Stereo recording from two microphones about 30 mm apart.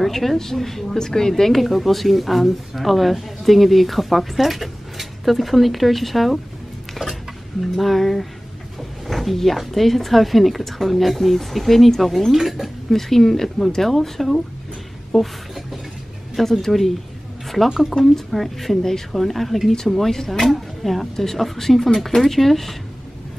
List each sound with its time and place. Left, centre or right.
0.0 s a woman's voice: centre
0.9 s a woman's voice: centre
1.3 s a woman's voice: centre
7.6 s a woman's voice: centre
12.3 s speech: centre
12.9 s a woman's voice: centre
15.1 s a sound: centre
16.6 s a woman's voice: centre
17.9 s a woman's voice: centre